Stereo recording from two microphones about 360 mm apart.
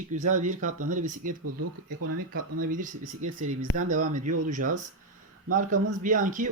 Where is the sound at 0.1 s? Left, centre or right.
Right.